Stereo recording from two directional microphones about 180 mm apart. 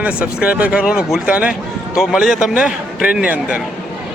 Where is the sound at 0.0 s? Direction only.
5° right (ahead or behind).